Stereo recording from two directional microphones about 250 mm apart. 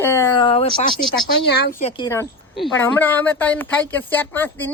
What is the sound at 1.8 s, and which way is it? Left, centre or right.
A woman's voice, left.